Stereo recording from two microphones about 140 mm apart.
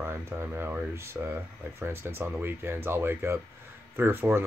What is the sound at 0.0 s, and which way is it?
Speech, 15° right (ahead or behind).